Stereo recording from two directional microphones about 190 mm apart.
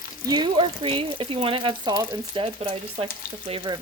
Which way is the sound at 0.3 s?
25° right (ahead or behind).